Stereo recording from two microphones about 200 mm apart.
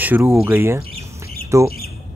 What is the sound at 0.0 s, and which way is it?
Speech, 10° right (ahead or behind).